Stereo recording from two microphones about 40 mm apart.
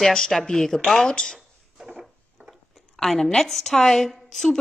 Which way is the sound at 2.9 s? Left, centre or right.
Centre.